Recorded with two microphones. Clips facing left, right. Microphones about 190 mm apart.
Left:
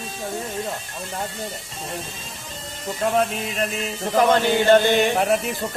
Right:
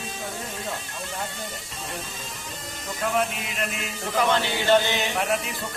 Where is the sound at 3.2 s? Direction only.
35° left (ahead or behind).